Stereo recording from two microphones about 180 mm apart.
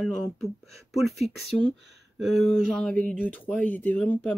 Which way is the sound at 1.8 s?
70° right (ahead or behind).